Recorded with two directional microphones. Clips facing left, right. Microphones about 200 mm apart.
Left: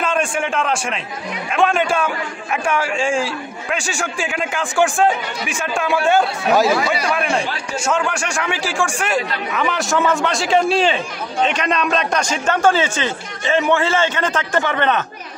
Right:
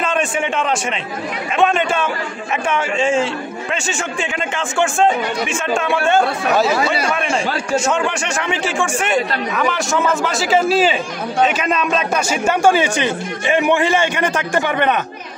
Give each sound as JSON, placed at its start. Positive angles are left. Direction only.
{"t": 0.0, "sound": "a man's voice", "side_deg": -5}
{"t": 7.9, "sound": "a man's voice", "side_deg": -5}